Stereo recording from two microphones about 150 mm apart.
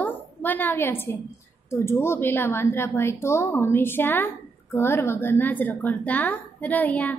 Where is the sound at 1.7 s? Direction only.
15° left (ahead or behind).